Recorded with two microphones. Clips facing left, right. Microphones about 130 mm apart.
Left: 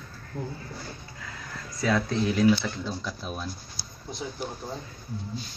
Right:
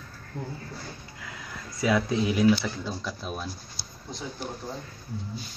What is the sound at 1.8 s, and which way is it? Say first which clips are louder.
Speech: right 1 dB; 10° right (ahead or behind).